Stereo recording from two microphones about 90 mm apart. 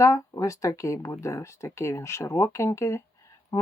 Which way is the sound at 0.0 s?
35° left (ahead or behind).